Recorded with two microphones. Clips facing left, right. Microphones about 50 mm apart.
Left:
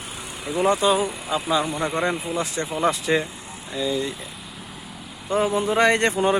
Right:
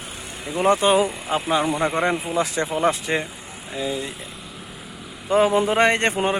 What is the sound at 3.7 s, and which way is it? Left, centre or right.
Speech, right.